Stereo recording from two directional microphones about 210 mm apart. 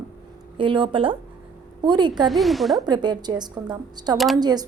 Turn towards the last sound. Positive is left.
turn(degrees=-20)  # may be behind; listen again after turning